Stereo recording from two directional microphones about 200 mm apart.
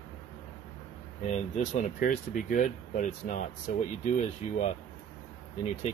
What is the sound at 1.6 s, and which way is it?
Speech, 40° left (ahead or behind).